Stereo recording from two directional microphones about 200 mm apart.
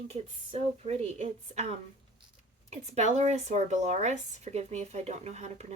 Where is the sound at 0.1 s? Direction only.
35° right (ahead or behind).